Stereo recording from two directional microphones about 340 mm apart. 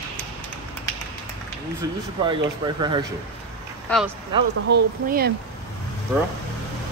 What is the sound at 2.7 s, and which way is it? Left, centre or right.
Speech, centre.